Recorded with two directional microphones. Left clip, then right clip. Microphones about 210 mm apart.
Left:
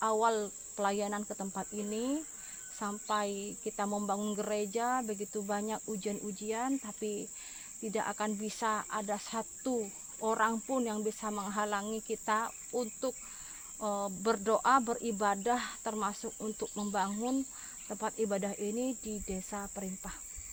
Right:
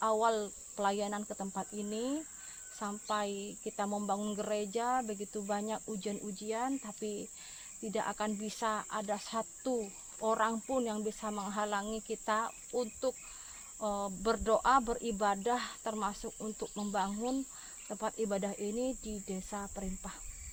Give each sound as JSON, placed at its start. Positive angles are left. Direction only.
{"t": 0.0, "sound": "speech", "side_deg": 25}